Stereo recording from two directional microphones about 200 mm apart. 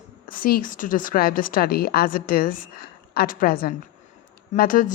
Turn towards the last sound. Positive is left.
turn(degrees=45)  # may be behind; listen again after turning